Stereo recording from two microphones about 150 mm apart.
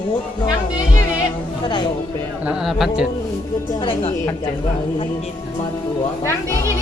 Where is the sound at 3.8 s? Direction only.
40° left (ahead or behind).